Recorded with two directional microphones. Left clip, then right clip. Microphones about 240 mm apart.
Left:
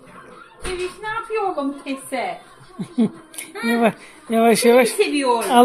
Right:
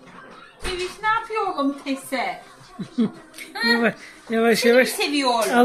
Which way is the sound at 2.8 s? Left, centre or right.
Centre.